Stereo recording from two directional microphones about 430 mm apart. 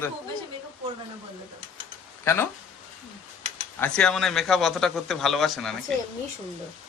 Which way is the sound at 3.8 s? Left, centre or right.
Centre.